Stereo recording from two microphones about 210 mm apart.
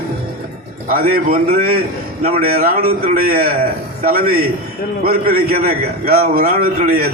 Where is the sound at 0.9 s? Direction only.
45° right (ahead or behind).